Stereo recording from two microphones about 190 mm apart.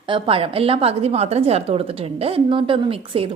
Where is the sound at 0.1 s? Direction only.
30° right (ahead or behind).